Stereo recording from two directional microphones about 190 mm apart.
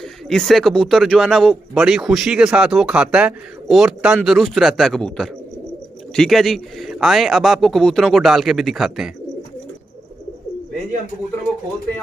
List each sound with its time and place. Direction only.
0.3 s speech: centre (ahead or behind)